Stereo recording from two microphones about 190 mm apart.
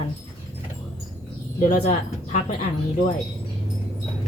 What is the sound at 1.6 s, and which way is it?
Speech, 45° left (ahead or behind).